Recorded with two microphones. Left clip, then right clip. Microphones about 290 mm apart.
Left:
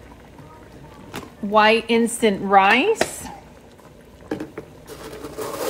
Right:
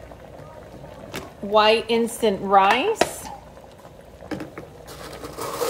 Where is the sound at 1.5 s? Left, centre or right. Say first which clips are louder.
Left 1 dB; left.